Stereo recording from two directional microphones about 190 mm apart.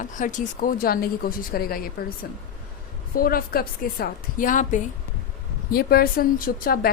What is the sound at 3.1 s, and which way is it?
A woman's voice, 50° left (ahead or behind).